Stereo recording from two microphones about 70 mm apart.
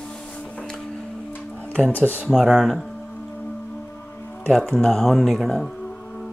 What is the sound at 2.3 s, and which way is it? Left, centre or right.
Speech, centre.